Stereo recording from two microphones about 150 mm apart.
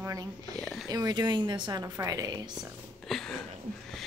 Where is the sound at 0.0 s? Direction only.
25° right (ahead or behind).